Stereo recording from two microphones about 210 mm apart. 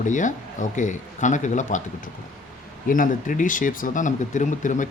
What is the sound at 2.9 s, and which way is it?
Speech, 40° left (ahead or behind).